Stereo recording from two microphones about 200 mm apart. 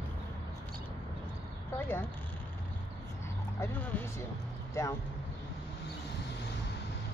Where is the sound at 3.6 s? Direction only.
10° left (ahead or behind).